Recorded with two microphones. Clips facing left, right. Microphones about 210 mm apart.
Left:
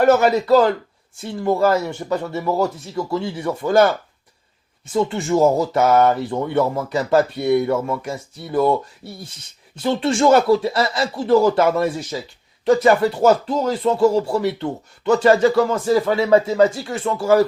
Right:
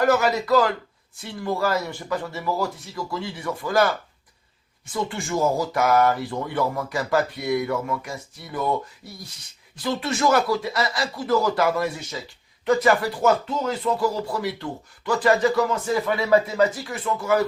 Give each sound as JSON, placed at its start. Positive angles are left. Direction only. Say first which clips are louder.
{"t": 0.0, "sound": "speech", "louder": "left 6 dB", "side_deg": 25}
{"t": 4.9, "sound": "speech", "louder": "left 8 dB", "side_deg": 25}